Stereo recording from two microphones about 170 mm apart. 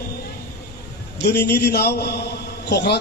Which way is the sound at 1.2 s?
75° left (ahead or behind).